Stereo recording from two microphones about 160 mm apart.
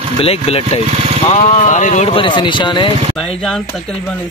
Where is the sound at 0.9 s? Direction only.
40° right (ahead or behind).